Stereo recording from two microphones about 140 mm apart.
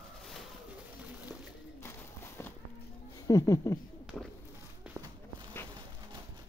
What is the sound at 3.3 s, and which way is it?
Speech, 20° left (ahead or behind).